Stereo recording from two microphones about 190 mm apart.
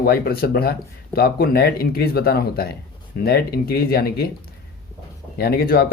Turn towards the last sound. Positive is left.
turn(degrees=50)  # may be behind; listen again after turning